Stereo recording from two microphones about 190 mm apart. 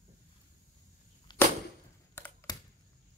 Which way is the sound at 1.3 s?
25° left (ahead or behind).